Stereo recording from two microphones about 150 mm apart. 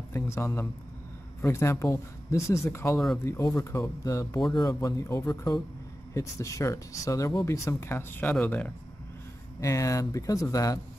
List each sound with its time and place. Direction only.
0.1 s speech: 20° left (ahead or behind)
9.6 s speech: 20° left (ahead or behind)